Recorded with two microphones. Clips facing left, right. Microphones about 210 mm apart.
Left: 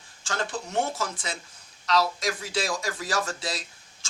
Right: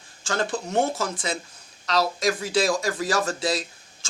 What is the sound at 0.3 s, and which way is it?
Speech, 40° right (ahead or behind).